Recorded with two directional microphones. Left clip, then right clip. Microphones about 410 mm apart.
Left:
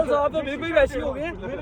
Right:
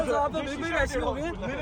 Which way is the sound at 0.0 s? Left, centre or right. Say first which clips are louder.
Left 5 dB; right.